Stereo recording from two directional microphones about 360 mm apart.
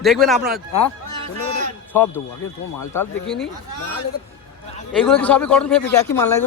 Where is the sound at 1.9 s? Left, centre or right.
Centre.